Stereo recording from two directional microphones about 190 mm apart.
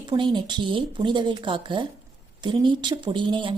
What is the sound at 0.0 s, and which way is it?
A woman's voice, 25° right (ahead or behind).